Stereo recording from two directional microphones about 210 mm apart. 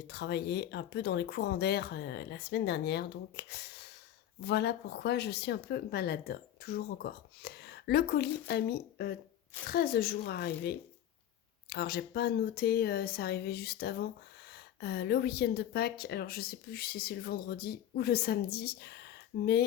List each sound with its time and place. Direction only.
0.1 s a woman's voice: 55° left (ahead or behind)